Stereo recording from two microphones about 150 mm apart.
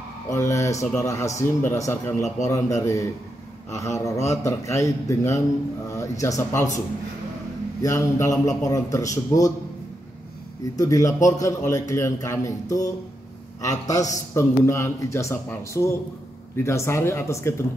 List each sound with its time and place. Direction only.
0.3 s a man's voice: 20° left (ahead or behind)
7.8 s a man's voice: 20° left (ahead or behind)
10.8 s a man's voice: 20° left (ahead or behind)